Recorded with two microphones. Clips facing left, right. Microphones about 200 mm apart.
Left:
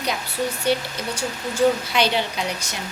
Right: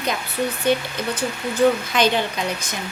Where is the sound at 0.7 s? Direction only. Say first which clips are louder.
Right 3 dB; 10° left (ahead or behind).